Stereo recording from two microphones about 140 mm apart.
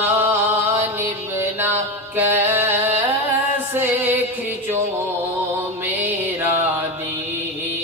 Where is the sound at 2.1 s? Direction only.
15° right (ahead or behind).